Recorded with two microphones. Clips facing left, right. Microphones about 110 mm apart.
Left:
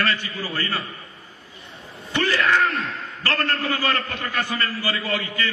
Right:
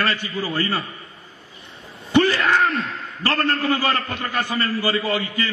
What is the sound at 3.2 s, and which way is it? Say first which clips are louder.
Speech: right 3 dB; 15° right (ahead or behind).